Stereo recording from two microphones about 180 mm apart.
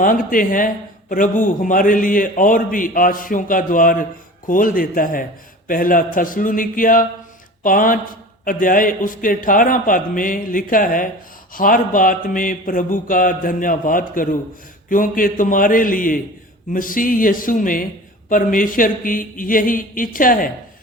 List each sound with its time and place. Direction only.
0.0 s a man's voice: 50° left (ahead or behind)